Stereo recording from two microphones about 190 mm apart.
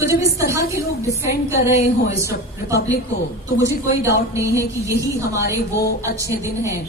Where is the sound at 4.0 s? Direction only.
15° right (ahead or behind).